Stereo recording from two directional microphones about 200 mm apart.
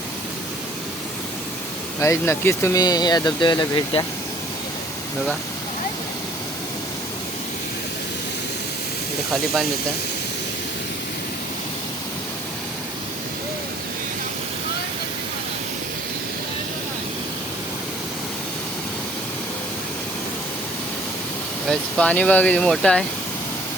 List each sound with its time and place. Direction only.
2.0 s speech: 15° left (ahead or behind)
21.7 s speech: 5° left (ahead or behind)